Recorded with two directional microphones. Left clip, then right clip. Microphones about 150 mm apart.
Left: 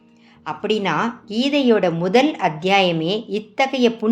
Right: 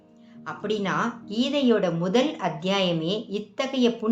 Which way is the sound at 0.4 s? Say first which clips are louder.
Left 7 dB; 15° left (ahead or behind).